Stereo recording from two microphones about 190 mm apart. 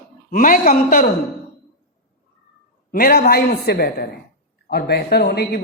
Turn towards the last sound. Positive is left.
turn(degrees=55)  # may be behind; listen again after turning